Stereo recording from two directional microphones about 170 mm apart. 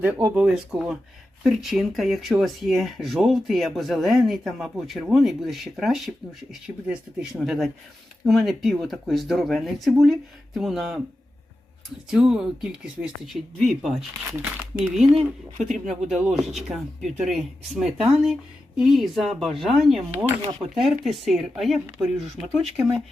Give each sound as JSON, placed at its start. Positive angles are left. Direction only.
{"t": 0.0, "sound": "speech", "side_deg": -20}
{"t": 0.3, "sound": "speech", "side_deg": -5}
{"t": 12.1, "sound": "speech", "side_deg": -5}